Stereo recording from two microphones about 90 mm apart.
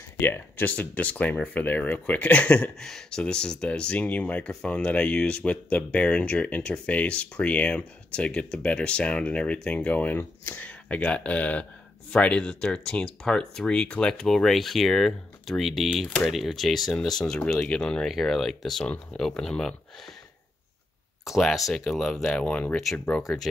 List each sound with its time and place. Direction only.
0.2 s speech: 25° left (ahead or behind); by 19.7 s 5° left (ahead or behind)
21.3 s speech: centre (ahead or behind); by 23.2 s 15° left (ahead or behind)
23.2 s speech: centre (ahead or behind)